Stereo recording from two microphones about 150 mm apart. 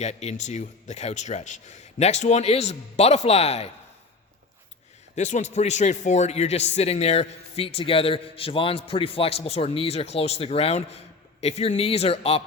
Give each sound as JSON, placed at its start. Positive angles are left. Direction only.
{"t": 0.0, "sound": "a man's voice", "side_deg": 50}
{"t": 5.1, "sound": "a man's voice", "side_deg": 50}